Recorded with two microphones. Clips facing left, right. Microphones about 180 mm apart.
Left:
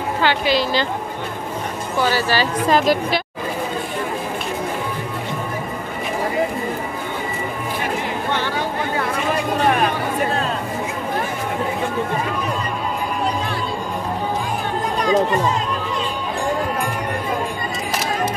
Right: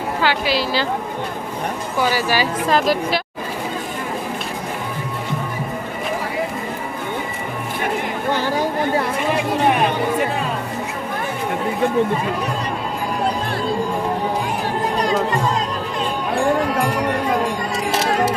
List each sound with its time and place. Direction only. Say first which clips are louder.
0.2 s a woman's voice: left 2 dB; 5° right (ahead or behind)
2.0 s speech: even; 10° right (ahead or behind)
2.7 s a woman's voice: left 1 dB; centre (ahead or behind)
8.3 s a sound: right 5 dB; 40° right (ahead or behind)
16.7 s run: right 4 dB; 80° right